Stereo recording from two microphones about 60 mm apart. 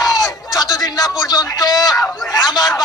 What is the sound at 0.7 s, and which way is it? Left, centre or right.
Speech, left.